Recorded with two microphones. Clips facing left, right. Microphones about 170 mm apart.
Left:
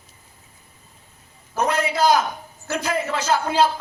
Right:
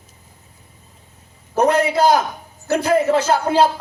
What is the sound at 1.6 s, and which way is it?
A man's voice, 60° right (ahead or behind).